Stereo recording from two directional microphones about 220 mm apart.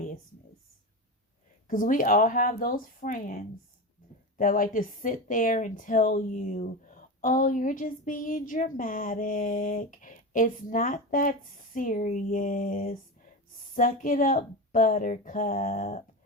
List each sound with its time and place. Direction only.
1.6 s a woman's voice: 40° left (ahead or behind)
4.4 s a woman's voice: 40° left (ahead or behind)